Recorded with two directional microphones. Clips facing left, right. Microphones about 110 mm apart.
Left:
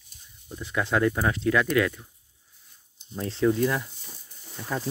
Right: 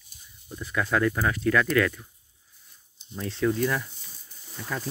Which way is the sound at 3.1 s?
30° left (ahead or behind).